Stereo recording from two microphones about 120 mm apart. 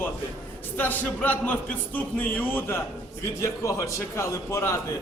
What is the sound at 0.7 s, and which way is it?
Speech, 15° left (ahead or behind).